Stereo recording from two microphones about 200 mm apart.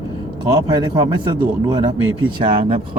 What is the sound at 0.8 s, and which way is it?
Speech, 20° right (ahead or behind).